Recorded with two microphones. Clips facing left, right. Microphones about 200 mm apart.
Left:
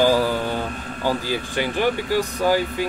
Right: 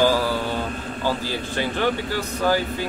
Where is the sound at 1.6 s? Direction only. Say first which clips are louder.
Left 1 dB; 15° left (ahead or behind).